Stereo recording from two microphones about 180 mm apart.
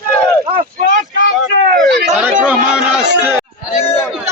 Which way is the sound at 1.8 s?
65° right (ahead or behind).